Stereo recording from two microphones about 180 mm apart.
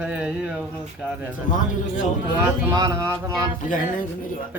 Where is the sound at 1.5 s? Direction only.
45° left (ahead or behind).